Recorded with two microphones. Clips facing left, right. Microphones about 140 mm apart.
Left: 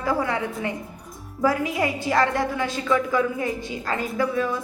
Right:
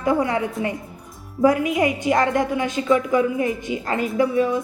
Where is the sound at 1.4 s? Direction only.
20° right (ahead or behind).